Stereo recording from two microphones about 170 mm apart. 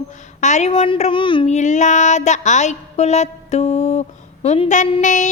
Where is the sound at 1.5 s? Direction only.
45° left (ahead or behind).